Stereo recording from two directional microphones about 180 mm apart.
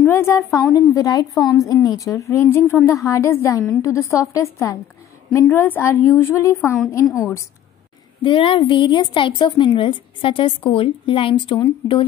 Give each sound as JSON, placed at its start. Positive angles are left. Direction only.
{"t": 0.0, "sound": "a sound", "side_deg": 15}
{"t": 0.7, "sound": "a woman's voice", "side_deg": 20}
{"t": 8.2, "sound": "a woman's voice", "side_deg": 30}